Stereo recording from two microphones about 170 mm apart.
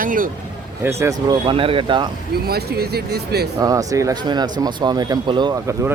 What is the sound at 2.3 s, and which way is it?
Speech, 65° right (ahead or behind).